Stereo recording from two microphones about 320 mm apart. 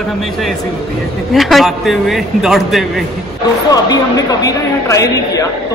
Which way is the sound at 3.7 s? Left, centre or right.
Centre.